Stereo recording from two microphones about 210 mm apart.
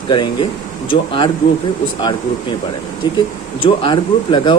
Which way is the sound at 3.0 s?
20° left (ahead or behind).